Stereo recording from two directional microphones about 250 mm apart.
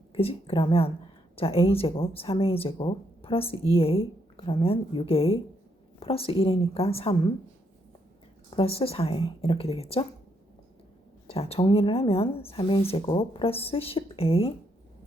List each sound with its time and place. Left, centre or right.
0.1 s speech: left
8.4 s speech: left
11.3 s speech: left